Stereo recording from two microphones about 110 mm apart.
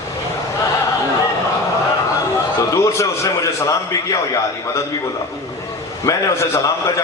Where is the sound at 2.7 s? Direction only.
25° left (ahead or behind).